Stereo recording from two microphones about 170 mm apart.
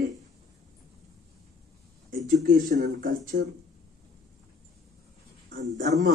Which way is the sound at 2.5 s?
55° right (ahead or behind).